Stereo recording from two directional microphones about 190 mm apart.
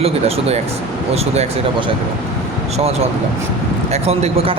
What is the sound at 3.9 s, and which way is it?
Speech, 35° right (ahead or behind).